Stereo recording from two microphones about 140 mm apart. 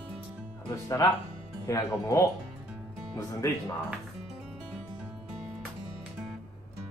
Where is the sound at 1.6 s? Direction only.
25° left (ahead or behind).